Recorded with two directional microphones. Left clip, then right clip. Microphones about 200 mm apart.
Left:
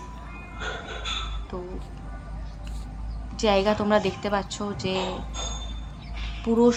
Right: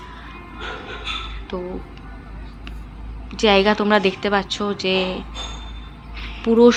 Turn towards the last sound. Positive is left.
turn(degrees=-10)  # may be behind; listen again after turning